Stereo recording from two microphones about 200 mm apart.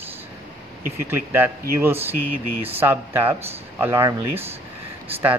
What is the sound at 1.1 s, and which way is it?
Speech, 10° right (ahead or behind).